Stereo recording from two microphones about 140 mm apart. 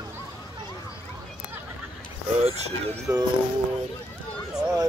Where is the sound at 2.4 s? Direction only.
45° right (ahead or behind).